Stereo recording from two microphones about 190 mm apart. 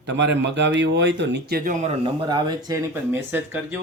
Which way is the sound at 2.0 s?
20° right (ahead or behind).